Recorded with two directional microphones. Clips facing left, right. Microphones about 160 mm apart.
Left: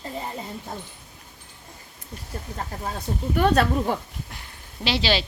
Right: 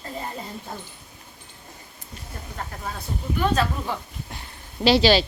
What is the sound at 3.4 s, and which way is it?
Speech, 60° left (ahead or behind).